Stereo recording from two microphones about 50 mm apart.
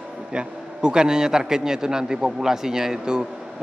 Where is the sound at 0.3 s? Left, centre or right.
Centre.